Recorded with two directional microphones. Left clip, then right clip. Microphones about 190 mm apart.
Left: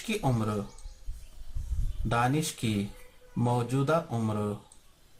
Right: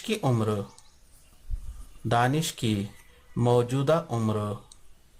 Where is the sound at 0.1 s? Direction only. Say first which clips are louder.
Right 3 dB; 55° right (ahead or behind).